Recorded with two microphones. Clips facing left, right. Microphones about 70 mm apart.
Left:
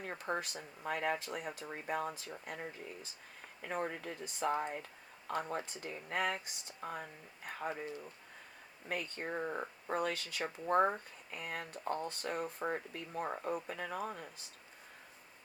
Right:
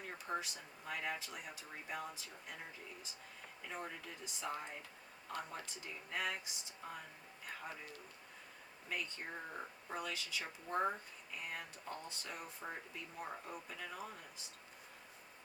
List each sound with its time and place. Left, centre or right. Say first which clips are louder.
0.0 s speech: left 4 dB; left
8.9 s speech: left 5 dB; left